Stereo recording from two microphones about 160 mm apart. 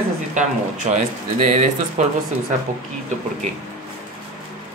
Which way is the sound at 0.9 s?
50° right (ahead or behind).